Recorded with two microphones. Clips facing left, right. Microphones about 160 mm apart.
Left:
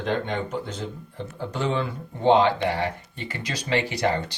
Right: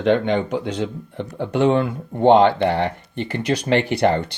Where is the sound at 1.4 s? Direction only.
60° right (ahead or behind).